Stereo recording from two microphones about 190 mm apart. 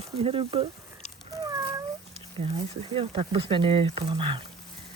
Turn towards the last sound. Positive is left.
turn(degrees=-25)  # may be behind; listen again after turning